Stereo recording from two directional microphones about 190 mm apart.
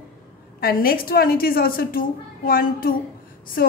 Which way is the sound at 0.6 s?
50° left (ahead or behind).